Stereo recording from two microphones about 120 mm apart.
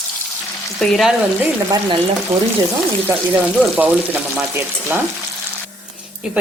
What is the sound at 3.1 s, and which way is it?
A woman's voice, 15° right (ahead or behind).